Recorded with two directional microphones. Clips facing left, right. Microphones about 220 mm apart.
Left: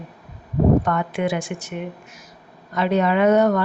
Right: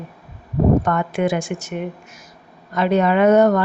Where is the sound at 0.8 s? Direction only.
45° right (ahead or behind).